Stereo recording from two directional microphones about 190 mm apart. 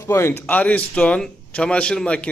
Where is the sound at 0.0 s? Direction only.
15° left (ahead or behind).